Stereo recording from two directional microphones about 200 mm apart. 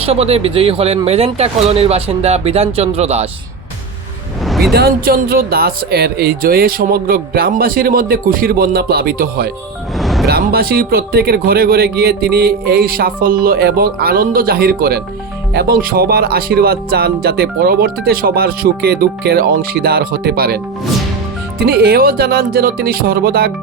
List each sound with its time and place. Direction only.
0.0 s speech: 30° right (ahead or behind)
4.4 s a sound: centre (ahead or behind)
4.7 s speech: 50° right (ahead or behind)
10.0 s music: centre (ahead or behind)
10.2 s speech: 50° right (ahead or behind)
21.6 s speech: 50° right (ahead or behind)